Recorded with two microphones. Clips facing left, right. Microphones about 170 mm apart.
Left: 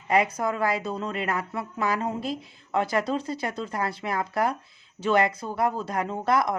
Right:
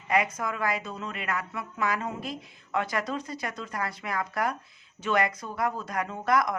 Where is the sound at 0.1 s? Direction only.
35° left (ahead or behind).